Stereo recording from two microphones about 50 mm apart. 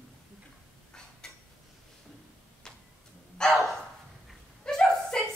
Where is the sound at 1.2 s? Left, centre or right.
Centre.